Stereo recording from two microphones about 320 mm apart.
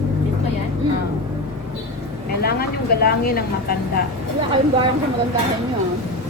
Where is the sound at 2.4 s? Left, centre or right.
Left.